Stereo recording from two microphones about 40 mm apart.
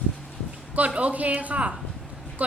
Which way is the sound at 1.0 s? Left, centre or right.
Right.